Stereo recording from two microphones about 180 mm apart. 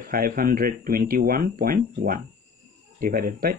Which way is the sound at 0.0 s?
55° right (ahead or behind).